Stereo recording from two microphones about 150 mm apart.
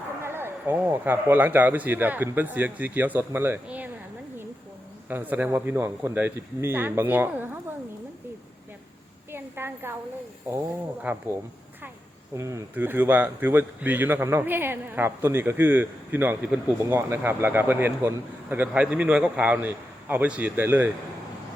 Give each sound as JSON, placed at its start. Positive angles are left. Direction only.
{"t": 0.2, "sound": "speech", "side_deg": -15}
{"t": 5.0, "sound": "speech", "side_deg": -10}
{"t": 9.3, "sound": "a sound", "side_deg": -15}
{"t": 11.1, "sound": "speech", "side_deg": -10}
{"t": 12.4, "sound": "speech", "side_deg": -20}